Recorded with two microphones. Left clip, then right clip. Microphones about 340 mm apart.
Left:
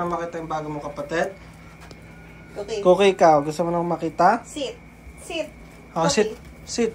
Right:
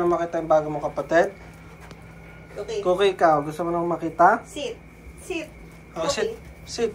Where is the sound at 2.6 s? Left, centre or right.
Centre.